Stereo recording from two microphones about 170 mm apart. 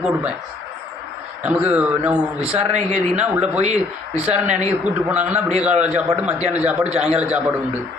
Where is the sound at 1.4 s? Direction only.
5° right (ahead or behind).